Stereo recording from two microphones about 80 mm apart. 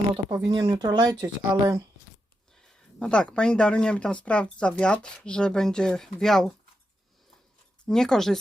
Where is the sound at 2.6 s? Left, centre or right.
Centre.